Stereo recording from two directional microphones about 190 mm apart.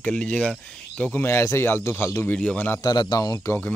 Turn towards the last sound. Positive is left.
turn(degrees=10)  # may be behind; listen again after turning